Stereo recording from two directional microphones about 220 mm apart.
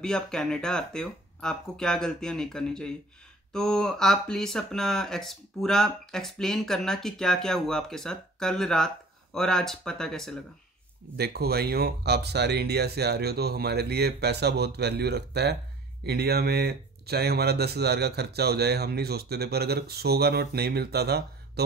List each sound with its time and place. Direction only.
0.0 s speech: 5° left (ahead or behind)
11.1 s speech: 45° right (ahead or behind)